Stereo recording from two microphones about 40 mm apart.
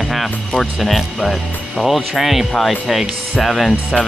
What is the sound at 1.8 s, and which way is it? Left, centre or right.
Speech, centre.